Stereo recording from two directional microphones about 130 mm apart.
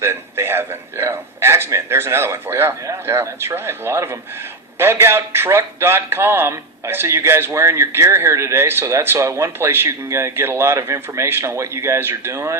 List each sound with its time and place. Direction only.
0.0 s a man's voice: 20° right (ahead or behind)